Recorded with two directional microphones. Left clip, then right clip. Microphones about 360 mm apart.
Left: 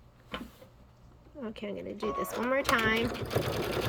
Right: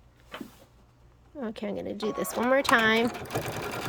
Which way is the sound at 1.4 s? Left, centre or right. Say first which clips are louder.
Right 5 dB; centre.